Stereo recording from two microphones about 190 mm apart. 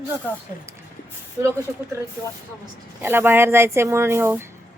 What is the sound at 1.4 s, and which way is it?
Speech, 15° right (ahead or behind).